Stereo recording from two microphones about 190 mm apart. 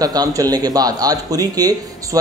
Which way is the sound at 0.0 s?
20° right (ahead or behind).